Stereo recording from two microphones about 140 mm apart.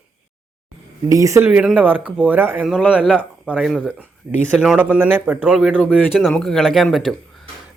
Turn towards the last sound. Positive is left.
turn(degrees=0)  # may be behind; listen again after turning